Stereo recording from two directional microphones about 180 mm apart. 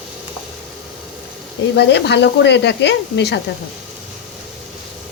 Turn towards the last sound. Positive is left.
turn(degrees=70)  # may be behind; listen again after turning